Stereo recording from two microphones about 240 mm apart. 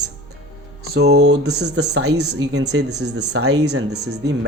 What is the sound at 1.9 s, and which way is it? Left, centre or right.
Speech, right.